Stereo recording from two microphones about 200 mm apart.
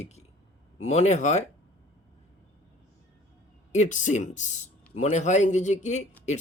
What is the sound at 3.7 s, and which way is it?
Speech, 35° left (ahead or behind).